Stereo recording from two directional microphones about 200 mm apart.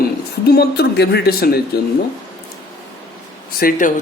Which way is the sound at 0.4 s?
55° left (ahead or behind).